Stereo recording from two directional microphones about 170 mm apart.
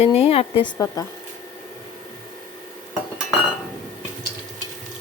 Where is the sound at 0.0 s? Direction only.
35° left (ahead or behind).